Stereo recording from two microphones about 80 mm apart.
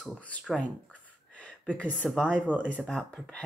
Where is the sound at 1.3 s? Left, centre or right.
Centre.